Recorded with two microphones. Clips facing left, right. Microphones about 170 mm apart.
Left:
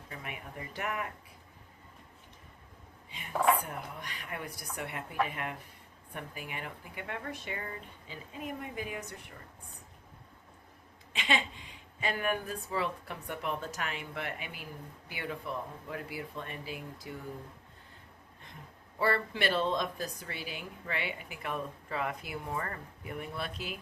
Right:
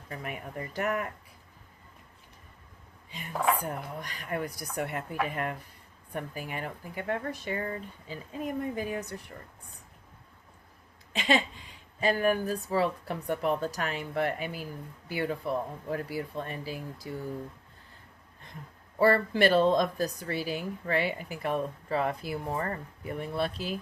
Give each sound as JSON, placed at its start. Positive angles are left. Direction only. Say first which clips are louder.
{"t": 0.1, "sound": "speech", "louder": "right 6 dB", "side_deg": -45}
{"t": 3.7, "sound": "speech", "louder": "right 5 dB", "side_deg": -40}
{"t": 11.1, "sound": "speech", "louder": "right 6 dB", "side_deg": -40}
{"t": 18.9, "sound": "speech", "louder": "right 7 dB", "side_deg": -40}